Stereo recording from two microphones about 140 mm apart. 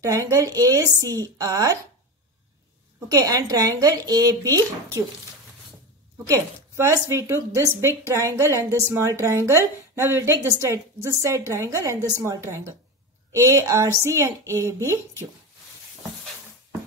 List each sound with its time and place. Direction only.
0.0 s a woman's voice: 20° right (ahead or behind)
3.1 s a woman's voice: 25° right (ahead or behind)
6.2 s a woman's voice: 25° right (ahead or behind)